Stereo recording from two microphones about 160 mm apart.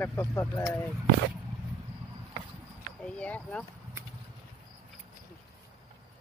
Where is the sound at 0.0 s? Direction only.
15° left (ahead or behind).